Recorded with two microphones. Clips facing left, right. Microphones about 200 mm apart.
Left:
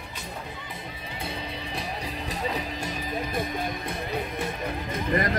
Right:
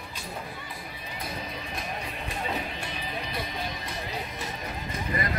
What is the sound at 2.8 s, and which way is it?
Music, 45° left (ahead or behind).